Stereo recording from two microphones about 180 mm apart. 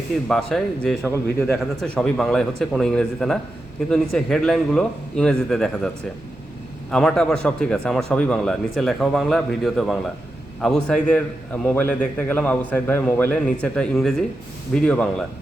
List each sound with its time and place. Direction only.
0.3 s speech: centre (ahead or behind)
6.9 s a man's voice: 5° left (ahead or behind)